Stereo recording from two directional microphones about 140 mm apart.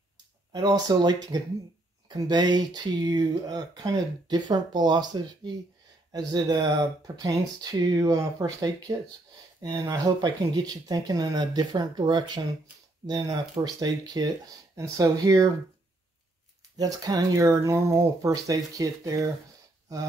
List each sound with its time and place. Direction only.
0.5 s speech: 25° right (ahead or behind)
16.7 s speech: 25° right (ahead or behind)